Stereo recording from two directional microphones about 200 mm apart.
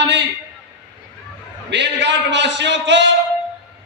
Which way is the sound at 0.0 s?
60° right (ahead or behind).